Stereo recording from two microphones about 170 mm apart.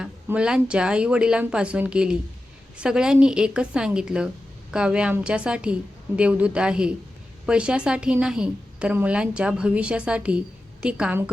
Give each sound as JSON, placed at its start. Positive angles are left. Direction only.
{"t": 0.0, "sound": "a woman's voice", "side_deg": -5}